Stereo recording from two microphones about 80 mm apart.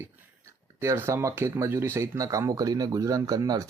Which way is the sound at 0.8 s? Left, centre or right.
Right.